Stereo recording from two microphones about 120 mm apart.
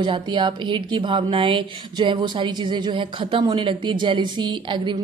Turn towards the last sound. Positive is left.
turn(degrees=-40)  # may be behind; listen again after turning